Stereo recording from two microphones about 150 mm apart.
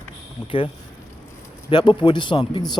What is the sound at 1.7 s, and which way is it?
Speech, 30° left (ahead or behind).